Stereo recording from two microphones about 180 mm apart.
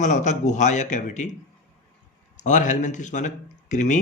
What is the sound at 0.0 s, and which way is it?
Speech, 45° left (ahead or behind).